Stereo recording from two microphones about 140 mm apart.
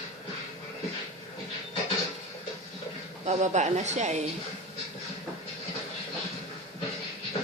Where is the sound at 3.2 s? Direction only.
55° right (ahead or behind).